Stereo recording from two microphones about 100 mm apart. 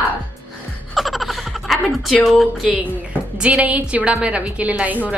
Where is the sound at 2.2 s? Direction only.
Centre (ahead or behind).